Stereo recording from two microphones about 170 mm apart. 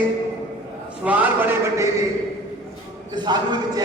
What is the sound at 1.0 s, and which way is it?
Speech, 10° right (ahead or behind).